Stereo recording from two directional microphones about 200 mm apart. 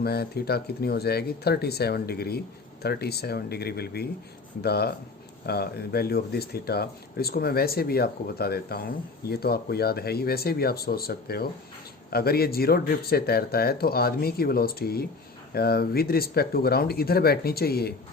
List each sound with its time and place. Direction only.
0.0 s speech: 50° left (ahead or behind)